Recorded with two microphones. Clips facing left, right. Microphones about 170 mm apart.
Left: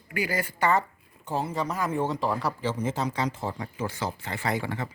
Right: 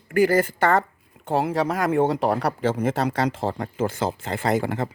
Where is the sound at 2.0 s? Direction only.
65° right (ahead or behind); by 3.5 s 90° right.